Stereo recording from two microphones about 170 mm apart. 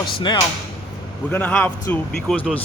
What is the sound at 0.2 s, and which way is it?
Speech, 25° left (ahead or behind).